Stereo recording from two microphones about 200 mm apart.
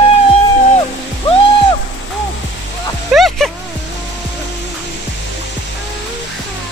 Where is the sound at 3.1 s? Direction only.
Centre (ahead or behind).